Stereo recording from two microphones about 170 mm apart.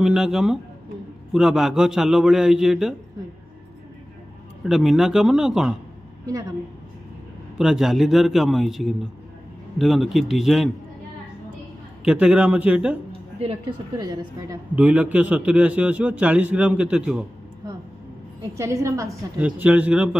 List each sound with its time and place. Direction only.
0.0 s a man's voice: 5° right (ahead or behind)
4.6 s a man's voice: centre (ahead or behind)
7.5 s a man's voice: 5° right (ahead or behind)
12.0 s a man's voice: 5° right (ahead or behind)
13.9 s a woman's voice: 25° right (ahead or behind)
14.8 s a man's voice: 10° right (ahead or behind)
18.5 s a man's voice: 20° right (ahead or behind)